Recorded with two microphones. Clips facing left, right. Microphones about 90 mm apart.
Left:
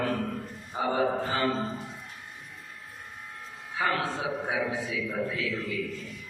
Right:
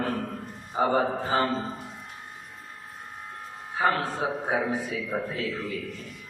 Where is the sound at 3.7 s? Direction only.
45° right (ahead or behind).